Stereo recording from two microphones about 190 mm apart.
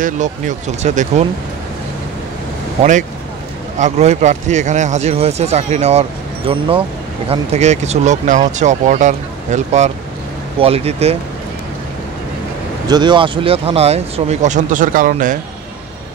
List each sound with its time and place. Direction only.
0.0 s speech: 40° right (ahead or behind)
2.8 s speech: 40° right (ahead or behind)
12.8 s speech: 20° right (ahead or behind); by 15.3 s 45° right (ahead or behind)